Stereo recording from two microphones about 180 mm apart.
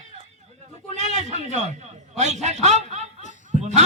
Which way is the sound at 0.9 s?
40° right (ahead or behind).